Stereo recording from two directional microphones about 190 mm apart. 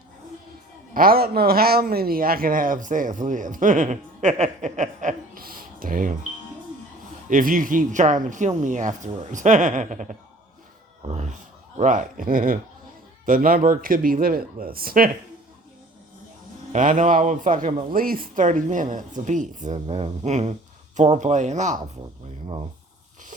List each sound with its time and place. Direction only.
0.9 s speech: 50° right (ahead or behind)
7.3 s speech: 45° right (ahead or behind)
16.7 s speech: 40° right (ahead or behind)